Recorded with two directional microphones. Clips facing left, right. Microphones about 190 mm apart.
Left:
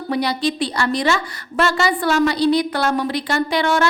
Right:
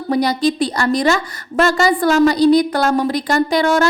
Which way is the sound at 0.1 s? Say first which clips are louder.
Right 5 dB; 45° right (ahead or behind).